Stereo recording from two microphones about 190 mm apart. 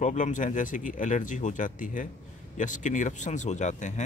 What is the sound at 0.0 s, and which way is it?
Speech, 40° left (ahead or behind).